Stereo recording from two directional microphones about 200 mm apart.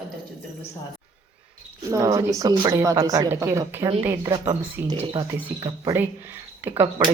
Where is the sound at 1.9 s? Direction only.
15° right (ahead or behind).